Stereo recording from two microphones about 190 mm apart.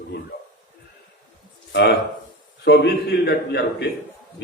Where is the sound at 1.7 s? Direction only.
60° left (ahead or behind).